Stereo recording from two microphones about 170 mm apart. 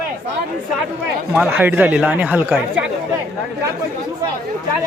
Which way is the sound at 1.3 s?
10° right (ahead or behind).